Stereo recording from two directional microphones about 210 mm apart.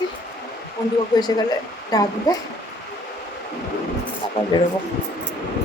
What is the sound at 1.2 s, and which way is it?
A woman's voice, 20° left (ahead or behind).